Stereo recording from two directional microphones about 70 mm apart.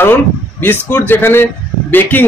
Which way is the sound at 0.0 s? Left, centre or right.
Left.